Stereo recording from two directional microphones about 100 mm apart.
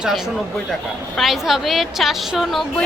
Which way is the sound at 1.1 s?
Centre (ahead or behind).